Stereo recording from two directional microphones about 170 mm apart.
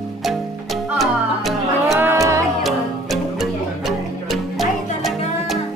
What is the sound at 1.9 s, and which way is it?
Music, 15° right (ahead or behind).